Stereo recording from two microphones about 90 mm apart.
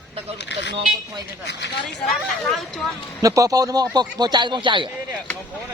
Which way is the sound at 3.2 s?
40° right (ahead or behind).